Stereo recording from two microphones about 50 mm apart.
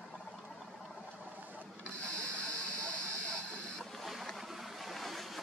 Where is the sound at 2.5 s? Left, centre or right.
Right.